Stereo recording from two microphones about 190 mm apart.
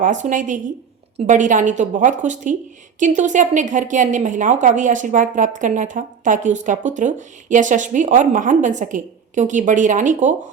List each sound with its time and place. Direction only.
0.0 s a woman's voice: 40° right (ahead or behind)